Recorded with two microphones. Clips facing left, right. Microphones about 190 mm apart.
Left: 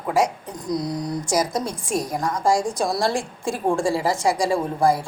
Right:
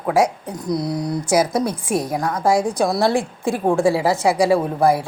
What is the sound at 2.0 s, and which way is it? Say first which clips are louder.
Speech: right 1 dB; 5° right (ahead or behind).